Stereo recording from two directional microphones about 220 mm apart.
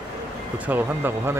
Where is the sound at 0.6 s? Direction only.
10° right (ahead or behind).